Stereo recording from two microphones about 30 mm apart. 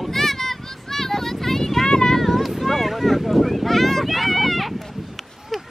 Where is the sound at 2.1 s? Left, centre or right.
Centre.